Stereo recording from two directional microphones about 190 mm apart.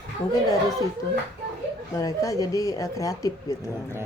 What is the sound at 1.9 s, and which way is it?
Speech, 15° left (ahead or behind).